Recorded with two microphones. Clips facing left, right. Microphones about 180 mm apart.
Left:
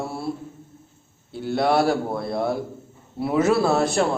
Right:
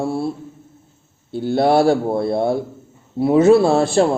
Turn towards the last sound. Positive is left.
turn(degrees=-30)  # may be behind; listen again after turning